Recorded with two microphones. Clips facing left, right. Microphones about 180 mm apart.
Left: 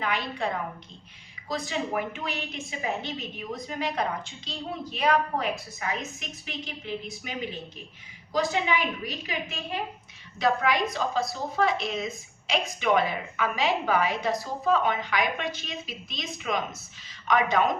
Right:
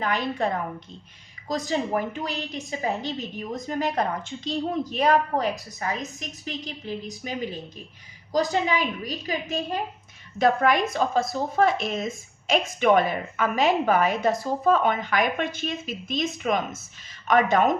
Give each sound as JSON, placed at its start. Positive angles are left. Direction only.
{"t": 0.0, "sound": "a woman's voice", "side_deg": -40}